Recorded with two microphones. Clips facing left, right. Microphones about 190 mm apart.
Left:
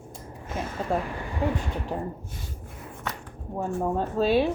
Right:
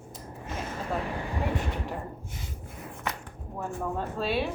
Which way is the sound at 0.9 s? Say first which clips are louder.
Left 5 dB; 25° left (ahead or behind).